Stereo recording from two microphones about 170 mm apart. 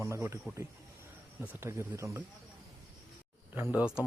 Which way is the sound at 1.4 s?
15° right (ahead or behind).